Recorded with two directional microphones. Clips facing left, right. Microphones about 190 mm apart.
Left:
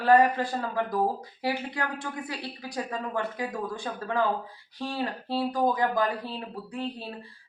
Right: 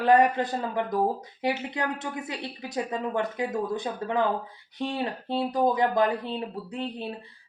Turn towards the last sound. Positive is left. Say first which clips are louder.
# right 2 dB
turn(degrees=-20)  # may be behind; listen again after turning